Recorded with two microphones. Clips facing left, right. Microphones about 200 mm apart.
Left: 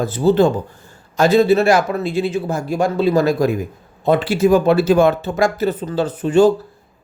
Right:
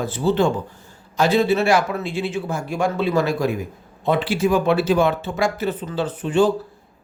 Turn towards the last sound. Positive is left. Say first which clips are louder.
# left 5 dB
turn(degrees=40)  # may be behind; listen again after turning